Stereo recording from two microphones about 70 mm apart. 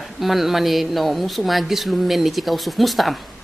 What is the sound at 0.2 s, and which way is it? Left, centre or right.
A woman's voice, centre.